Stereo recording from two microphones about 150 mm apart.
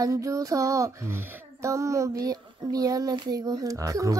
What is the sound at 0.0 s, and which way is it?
Child singing, 20° right (ahead or behind).